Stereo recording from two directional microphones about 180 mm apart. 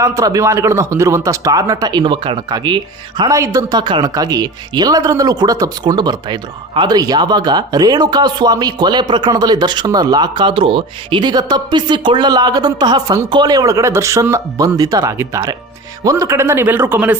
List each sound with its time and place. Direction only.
0.0 s speech: 20° right (ahead or behind)